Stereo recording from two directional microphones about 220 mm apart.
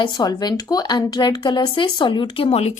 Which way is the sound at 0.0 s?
20° left (ahead or behind).